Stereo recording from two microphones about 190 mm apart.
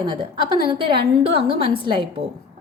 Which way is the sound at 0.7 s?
25° right (ahead or behind).